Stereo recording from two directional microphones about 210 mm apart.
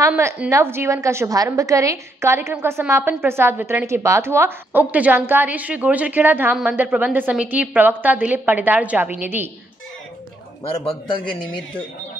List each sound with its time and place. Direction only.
0.0 s a woman's voice: 15° right (ahead or behind)
10.9 s a man's voice: 25° left (ahead or behind)